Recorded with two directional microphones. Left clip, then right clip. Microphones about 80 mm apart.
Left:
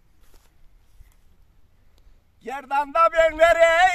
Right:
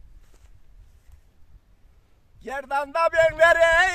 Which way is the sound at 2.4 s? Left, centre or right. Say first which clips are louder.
Left 2 dB; right.